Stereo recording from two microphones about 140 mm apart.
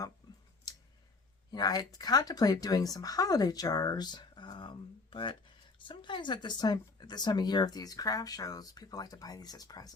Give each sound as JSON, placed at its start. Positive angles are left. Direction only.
{"t": 1.5, "sound": "speech", "side_deg": 30}